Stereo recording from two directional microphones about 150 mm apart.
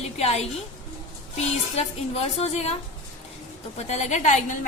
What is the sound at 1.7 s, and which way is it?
A woman's voice, 45° left (ahead or behind).